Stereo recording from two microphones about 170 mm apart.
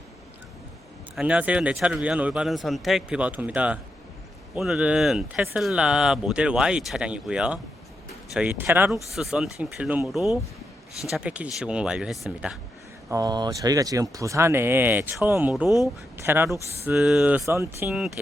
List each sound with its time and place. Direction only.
1.1 s speech: 5° right (ahead or behind)
13.1 s speech: 20° right (ahead or behind); by 15.9 s 5° right (ahead or behind)
16.2 s speech: 15° right (ahead or behind)
16.8 s speech: centre (ahead or behind)